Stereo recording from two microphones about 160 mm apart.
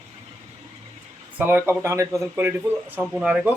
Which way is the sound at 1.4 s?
10° right (ahead or behind).